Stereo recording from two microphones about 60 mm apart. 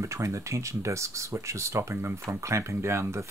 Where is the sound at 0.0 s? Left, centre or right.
Right.